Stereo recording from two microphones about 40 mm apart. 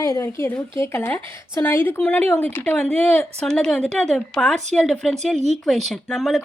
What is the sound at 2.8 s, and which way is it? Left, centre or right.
Speech, left.